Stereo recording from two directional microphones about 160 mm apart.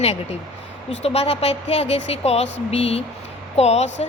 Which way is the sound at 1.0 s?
40° left (ahead or behind).